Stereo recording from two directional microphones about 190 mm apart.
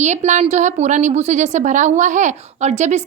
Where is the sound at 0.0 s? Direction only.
40° right (ahead or behind).